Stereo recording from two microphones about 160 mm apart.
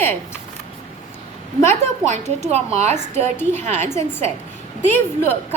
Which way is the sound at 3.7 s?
15° left (ahead or behind).